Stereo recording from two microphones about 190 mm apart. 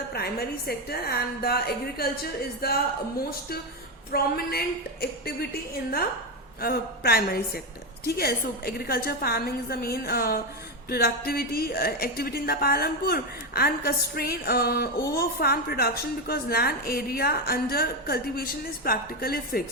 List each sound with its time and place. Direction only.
0.1 s a woman's voice: 55° left (ahead or behind)
4.1 s a woman's voice: 55° left (ahead or behind)